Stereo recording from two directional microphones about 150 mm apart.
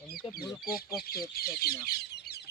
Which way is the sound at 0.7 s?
90° left.